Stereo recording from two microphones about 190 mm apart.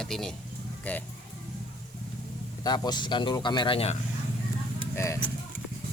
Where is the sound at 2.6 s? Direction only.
20° left (ahead or behind).